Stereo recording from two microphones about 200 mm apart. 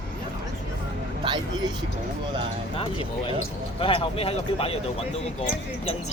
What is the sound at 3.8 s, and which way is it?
Speech, 30° left (ahead or behind).